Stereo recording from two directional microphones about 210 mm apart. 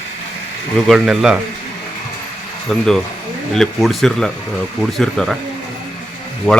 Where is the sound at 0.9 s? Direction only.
Centre (ahead or behind).